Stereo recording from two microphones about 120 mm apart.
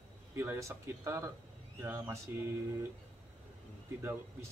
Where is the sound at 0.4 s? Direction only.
20° right (ahead or behind).